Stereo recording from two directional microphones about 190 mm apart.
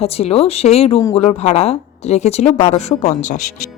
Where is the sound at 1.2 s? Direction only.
30° left (ahead or behind).